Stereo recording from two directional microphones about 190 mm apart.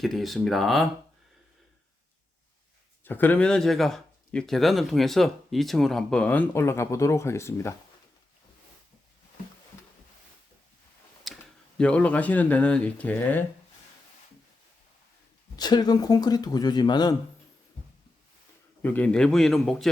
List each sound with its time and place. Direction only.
0.0 s speech: centre (ahead or behind)
3.0 s speech: 10° left (ahead or behind)
11.3 s a sound: centre (ahead or behind)
11.8 s speech: 5° left (ahead or behind)
15.5 s speech: 20° left (ahead or behind)
18.8 s speech: 10° left (ahead or behind)